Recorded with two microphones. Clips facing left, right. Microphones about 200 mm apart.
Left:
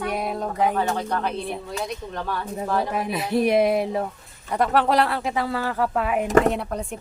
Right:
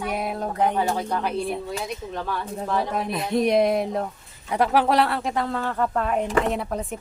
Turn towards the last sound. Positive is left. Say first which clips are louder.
# even
turn(degrees=0)  # may be behind; listen again after turning